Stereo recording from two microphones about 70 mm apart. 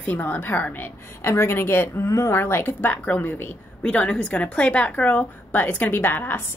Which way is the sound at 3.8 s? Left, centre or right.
Centre.